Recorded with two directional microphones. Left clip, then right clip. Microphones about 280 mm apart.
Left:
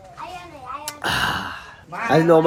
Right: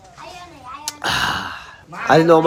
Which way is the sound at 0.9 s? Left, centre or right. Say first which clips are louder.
Right 2 dB; centre.